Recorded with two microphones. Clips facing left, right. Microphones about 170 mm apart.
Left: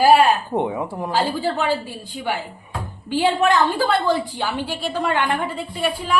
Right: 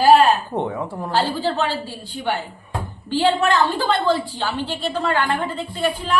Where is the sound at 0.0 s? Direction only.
10° left (ahead or behind).